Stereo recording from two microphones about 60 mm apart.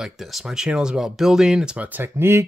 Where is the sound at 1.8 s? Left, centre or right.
Right.